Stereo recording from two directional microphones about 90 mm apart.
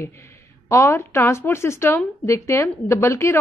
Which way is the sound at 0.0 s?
30° left (ahead or behind).